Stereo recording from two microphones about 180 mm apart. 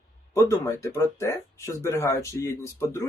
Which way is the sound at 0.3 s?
15° left (ahead or behind).